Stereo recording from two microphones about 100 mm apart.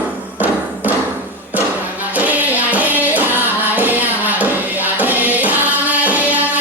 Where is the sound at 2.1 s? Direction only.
15° right (ahead or behind).